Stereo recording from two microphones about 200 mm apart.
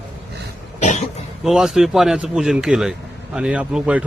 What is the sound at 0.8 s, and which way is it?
Cough, 35° left (ahead or behind).